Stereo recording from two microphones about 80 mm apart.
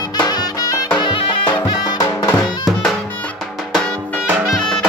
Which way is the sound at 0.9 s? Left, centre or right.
Left.